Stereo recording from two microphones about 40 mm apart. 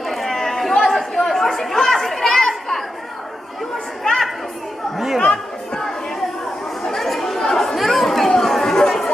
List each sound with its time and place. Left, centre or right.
0.0 s chatter: centre
1.7 s children playing: centre
4.0 s chatter: centre
4.9 s chatter: centre
5.2 s a sound: centre
6.8 s chatter: centre